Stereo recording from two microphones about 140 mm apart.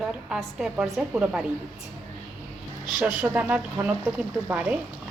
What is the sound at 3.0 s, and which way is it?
A woman's voice, 10° right (ahead or behind).